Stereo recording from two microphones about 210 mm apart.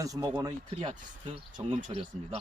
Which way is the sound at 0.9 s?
30° right (ahead or behind).